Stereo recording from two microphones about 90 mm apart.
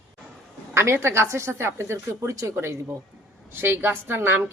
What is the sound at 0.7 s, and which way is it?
A woman's voice, 30° right (ahead or behind).